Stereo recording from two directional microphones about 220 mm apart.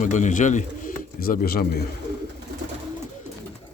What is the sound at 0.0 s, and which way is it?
Speech, 35° left (ahead or behind).